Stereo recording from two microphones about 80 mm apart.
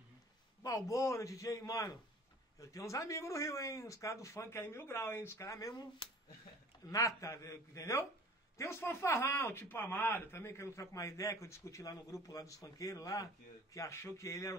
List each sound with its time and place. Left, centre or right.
0.6 s a man's voice: left
6.9 s a man's voice: left
13.7 s speech: left